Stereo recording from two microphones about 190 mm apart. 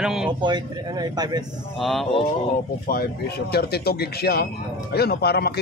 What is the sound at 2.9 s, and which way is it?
Speech, 55° left (ahead or behind).